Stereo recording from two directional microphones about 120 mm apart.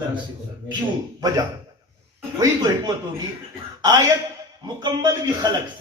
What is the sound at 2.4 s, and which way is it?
Speech, 35° right (ahead or behind).